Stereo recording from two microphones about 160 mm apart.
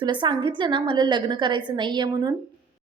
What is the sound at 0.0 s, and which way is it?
A woman's voice, 30° right (ahead or behind).